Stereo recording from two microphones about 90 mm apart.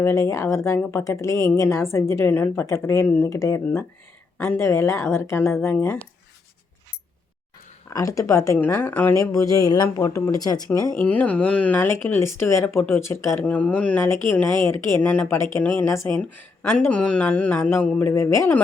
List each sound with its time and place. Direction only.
0.0 s speech: 35° left (ahead or behind)
3.2 s speech: 35° left (ahead or behind)
4.4 s speech: 25° left (ahead or behind)
7.9 s speech: 35° left (ahead or behind)
8.5 s speech: 20° left (ahead or behind)
9.1 s speech: 35° left (ahead or behind)
10.3 s speech: 45° left (ahead or behind)
10.9 s speech: 20° left (ahead or behind)
12.6 s speech: 20° left (ahead or behind)
13.4 s mantra: 15° left (ahead or behind)
14.1 s speech: 30° left (ahead or behind)
16.9 s mantra: 15° left (ahead or behind)
17.8 s mantra: 15° left (ahead or behind)
18.1 s speech: 30° left (ahead or behind)